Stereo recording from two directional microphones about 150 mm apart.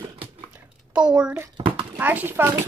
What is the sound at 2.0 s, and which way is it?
Speech, 10° right (ahead or behind).